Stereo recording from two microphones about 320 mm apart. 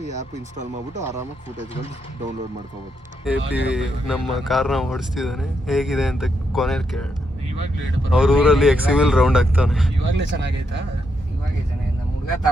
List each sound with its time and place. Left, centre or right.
0.0 s speech: right
3.2 s speech: centre
8.1 s speech: centre
10.1 s speech: right